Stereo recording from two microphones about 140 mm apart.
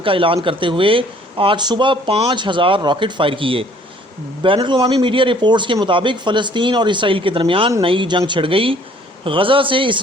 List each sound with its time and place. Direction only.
0.0 s speech: 40° right (ahead or behind)